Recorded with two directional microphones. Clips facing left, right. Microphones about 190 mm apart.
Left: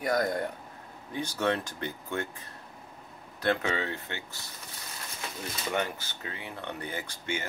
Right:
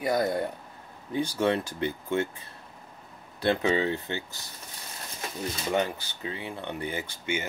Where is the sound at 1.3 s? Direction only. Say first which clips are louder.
Right 2 dB; 10° right (ahead or behind).